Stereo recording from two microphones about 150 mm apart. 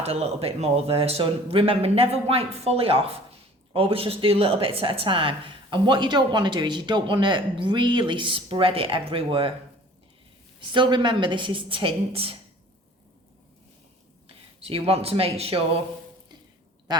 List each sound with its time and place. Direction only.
0.0 s speech: 45° right (ahead or behind)
10.6 s speech: 30° right (ahead or behind)
14.6 s speech: 40° right (ahead or behind)
16.9 s speech: 25° right (ahead or behind)